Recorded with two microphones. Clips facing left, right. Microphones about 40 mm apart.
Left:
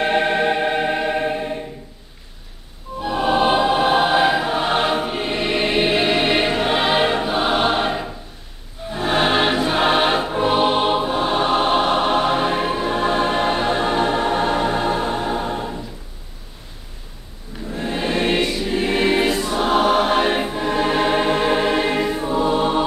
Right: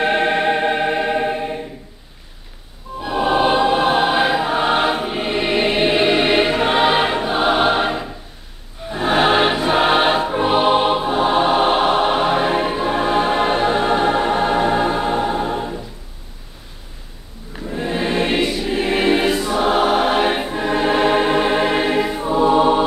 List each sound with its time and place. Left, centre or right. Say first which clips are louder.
0.0 s music: right 1 dB; centre
3.1 s choir: right 1 dB; centre
8.9 s music: right 3 dB; centre
17.6 s choir: right 2 dB; centre
21.8 s music: right 2 dB; centre